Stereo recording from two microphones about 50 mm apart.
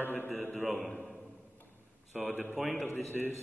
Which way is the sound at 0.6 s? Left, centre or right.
Centre.